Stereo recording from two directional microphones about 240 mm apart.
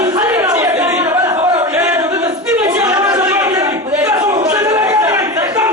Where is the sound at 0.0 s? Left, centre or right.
Centre.